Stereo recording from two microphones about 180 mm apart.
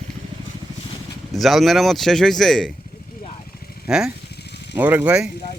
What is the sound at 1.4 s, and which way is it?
Speech, centre (ahead or behind).